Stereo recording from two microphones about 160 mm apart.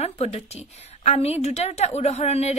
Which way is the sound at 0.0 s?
40° left (ahead or behind).